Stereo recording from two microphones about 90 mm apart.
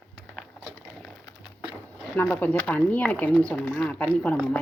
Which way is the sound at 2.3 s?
20° left (ahead or behind).